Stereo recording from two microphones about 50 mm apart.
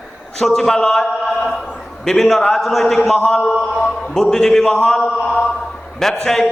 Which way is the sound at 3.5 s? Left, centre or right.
Centre.